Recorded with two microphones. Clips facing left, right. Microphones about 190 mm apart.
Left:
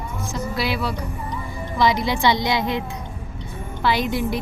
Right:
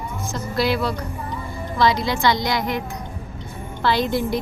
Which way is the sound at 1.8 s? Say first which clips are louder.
Even; 20° left (ahead or behind).